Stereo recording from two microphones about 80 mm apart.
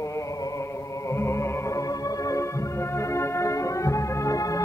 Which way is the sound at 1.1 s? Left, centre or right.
Left.